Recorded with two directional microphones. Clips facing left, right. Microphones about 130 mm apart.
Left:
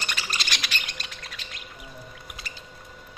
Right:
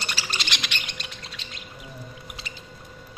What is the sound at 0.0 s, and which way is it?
Bird, 30° right (ahead or behind).